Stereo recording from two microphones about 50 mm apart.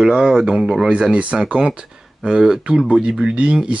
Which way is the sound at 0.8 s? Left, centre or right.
Right.